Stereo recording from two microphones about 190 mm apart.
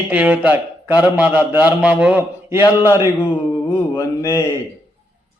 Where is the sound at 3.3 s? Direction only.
10° left (ahead or behind).